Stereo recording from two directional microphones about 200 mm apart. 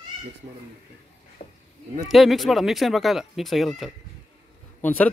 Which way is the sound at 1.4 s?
35° left (ahead or behind).